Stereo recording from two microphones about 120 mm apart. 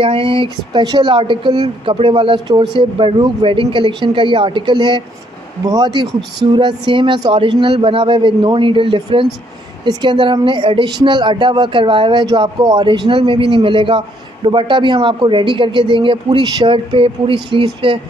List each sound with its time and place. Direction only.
0.0 s speech: 45° right (ahead or behind)